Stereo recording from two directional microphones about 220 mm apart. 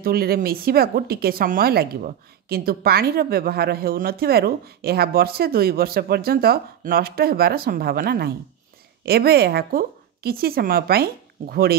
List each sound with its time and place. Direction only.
0.0 s a woman's voice: 45° right (ahead or behind)